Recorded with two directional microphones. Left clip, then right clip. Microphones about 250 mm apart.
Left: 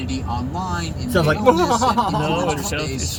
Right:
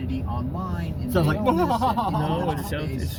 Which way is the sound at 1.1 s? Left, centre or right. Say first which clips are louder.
Left 7 dB; right.